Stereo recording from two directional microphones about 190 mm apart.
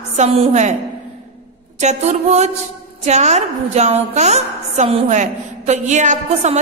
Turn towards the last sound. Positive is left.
turn(degrees=-40)  # may be behind; listen again after turning